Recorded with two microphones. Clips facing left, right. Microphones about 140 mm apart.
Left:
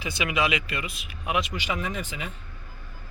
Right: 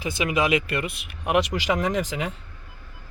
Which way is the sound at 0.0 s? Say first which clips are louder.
Right 3 dB; 45° right (ahead or behind).